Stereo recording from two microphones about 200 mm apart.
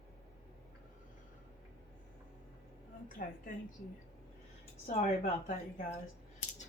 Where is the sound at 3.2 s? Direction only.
45° left (ahead or behind).